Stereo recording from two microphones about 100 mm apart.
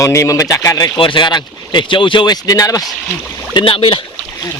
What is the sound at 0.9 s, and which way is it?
Speech, 55° left (ahead or behind).